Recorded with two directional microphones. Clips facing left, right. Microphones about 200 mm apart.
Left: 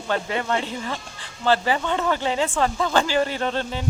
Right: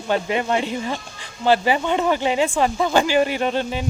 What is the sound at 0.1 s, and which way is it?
Speech, 15° right (ahead or behind).